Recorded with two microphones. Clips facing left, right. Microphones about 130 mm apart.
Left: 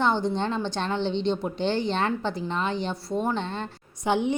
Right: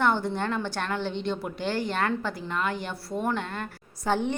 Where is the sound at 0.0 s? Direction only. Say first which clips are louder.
Left 1 dB; 20° left (ahead or behind).